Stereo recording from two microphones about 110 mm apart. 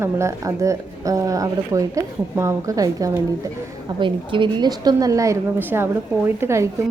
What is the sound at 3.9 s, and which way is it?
A woman's voice, 50° right (ahead or behind).